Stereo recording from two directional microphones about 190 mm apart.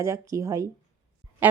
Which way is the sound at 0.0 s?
15° right (ahead or behind).